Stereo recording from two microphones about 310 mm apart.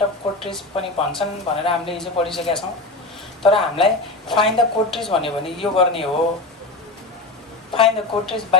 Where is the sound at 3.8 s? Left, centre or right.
Centre.